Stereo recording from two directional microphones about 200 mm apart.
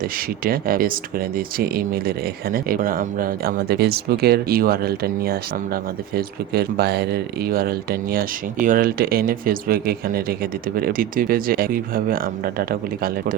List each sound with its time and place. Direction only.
0.4 s speech: 45° right (ahead or behind)